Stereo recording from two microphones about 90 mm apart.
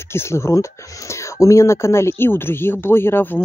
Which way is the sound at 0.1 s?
30° left (ahead or behind).